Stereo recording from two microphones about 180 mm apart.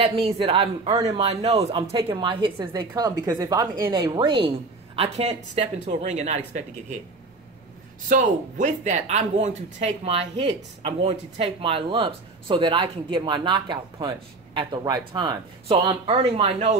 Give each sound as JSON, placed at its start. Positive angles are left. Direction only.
{"t": 0.0, "sound": "a woman's voice", "side_deg": -30}
{"t": 8.1, "sound": "a woman's voice", "side_deg": -45}